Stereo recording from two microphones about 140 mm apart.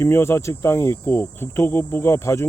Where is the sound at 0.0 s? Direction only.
20° left (ahead or behind).